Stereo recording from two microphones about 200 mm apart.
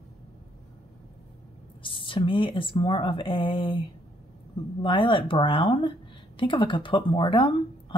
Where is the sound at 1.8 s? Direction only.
25° left (ahead or behind).